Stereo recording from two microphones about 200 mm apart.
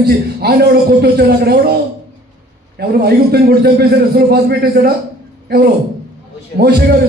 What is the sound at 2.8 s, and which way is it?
A man's voice, 50° right (ahead or behind).